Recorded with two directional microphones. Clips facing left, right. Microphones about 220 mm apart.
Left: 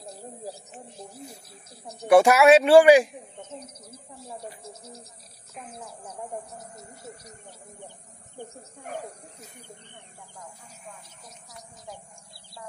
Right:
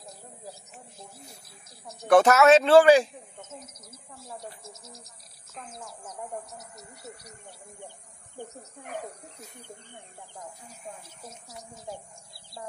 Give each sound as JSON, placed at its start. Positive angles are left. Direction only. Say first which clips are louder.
{"t": 2.0, "sound": "a man's voice", "louder": "left 2 dB", "side_deg": 10}